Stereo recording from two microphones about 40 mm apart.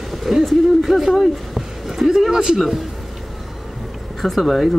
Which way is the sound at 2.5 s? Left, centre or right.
Centre.